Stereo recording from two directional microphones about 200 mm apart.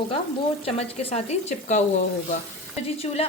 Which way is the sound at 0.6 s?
30° left (ahead or behind).